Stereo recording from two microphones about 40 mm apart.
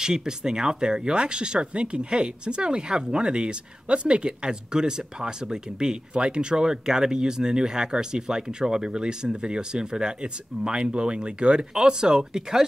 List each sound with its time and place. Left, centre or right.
0.0 s speech: centre